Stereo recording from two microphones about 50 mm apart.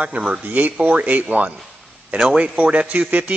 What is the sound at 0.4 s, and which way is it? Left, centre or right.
Speech, right.